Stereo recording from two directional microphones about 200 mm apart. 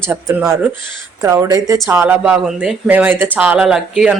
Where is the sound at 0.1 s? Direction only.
10° right (ahead or behind).